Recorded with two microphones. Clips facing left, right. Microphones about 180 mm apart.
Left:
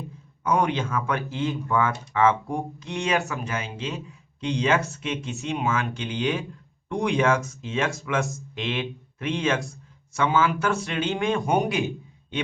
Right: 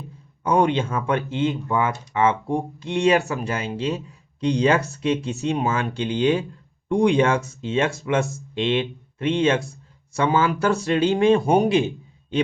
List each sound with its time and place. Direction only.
0.4 s speech: 30° right (ahead or behind)
2.5 s speech: 35° right (ahead or behind)